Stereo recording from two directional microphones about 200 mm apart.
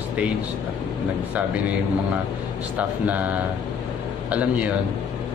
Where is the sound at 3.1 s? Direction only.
5° right (ahead or behind).